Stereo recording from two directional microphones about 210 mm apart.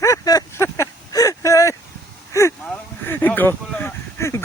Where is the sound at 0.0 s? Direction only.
15° left (ahead or behind).